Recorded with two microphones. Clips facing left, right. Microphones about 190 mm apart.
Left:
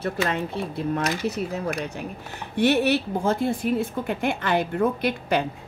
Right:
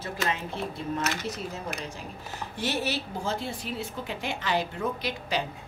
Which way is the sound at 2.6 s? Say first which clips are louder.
Left 10 dB; 60° left (ahead or behind).